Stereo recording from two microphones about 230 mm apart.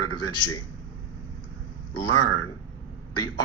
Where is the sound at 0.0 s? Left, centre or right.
Left.